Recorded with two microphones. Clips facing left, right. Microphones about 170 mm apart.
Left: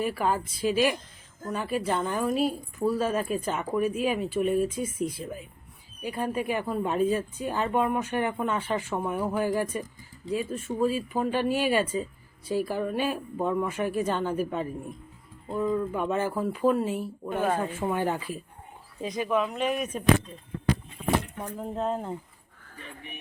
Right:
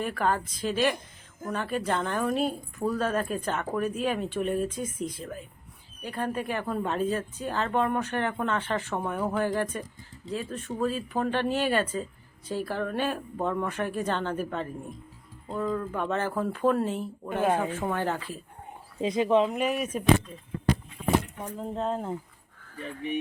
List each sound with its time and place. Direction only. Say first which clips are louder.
0.0 s speech: left 1 dB; 10° left (ahead or behind)
17.4 s speech: right 2 dB; 10° right (ahead or behind)
17.7 s speech: left 1 dB; 10° left (ahead or behind)
18.9 s speech: right 4 dB; 25° right (ahead or behind)
19.5 s speech: even; 5° right (ahead or behind)
21.3 s speech: left 1 dB; centre (ahead or behind)